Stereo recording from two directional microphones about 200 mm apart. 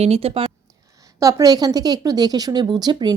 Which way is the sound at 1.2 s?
15° right (ahead or behind).